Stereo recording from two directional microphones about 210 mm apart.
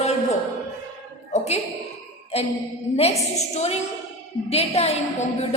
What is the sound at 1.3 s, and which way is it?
Speech, 30° left (ahead or behind).